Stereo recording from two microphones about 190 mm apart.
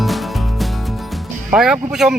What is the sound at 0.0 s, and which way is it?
Music, centre (ahead or behind).